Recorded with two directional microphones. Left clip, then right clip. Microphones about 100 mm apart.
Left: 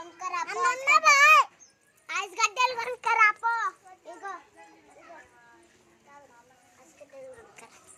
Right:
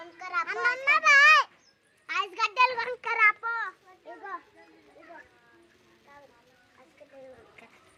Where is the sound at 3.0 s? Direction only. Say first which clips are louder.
Left 2 dB; 25° left (ahead or behind).